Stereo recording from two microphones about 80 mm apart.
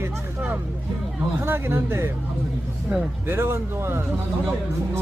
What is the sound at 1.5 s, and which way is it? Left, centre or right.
Speech, right.